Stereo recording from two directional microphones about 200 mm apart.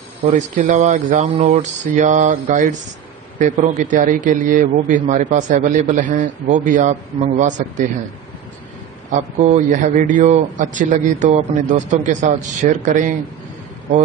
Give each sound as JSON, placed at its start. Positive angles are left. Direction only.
{"t": 0.3, "sound": "a man's voice", "side_deg": -35}
{"t": 9.1, "sound": "a man's voice", "side_deg": -35}